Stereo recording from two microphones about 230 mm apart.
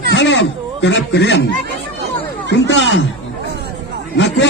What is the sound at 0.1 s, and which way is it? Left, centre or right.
A man's voice, left.